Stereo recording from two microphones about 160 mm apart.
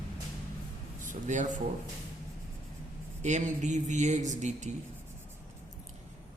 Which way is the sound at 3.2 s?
45° right (ahead or behind).